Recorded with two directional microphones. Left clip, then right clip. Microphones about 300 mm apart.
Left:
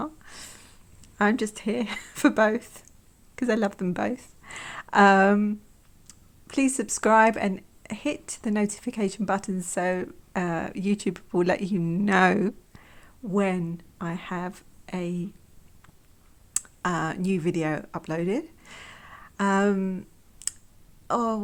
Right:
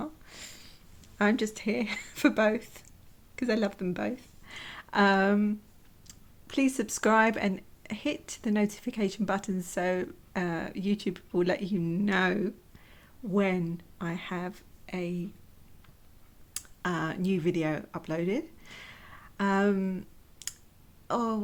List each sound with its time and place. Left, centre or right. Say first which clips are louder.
0.0 s sniff: left 5 dB; centre
1.2 s speech: left 3 dB; centre
16.6 s speech: left 5 dB; centre